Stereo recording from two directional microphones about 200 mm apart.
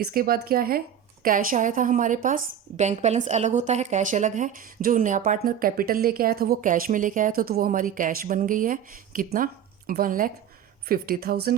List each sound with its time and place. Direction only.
0.0 s a woman's voice: 50° right (ahead or behind)